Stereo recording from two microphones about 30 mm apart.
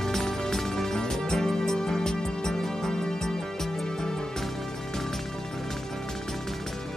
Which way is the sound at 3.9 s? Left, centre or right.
Left.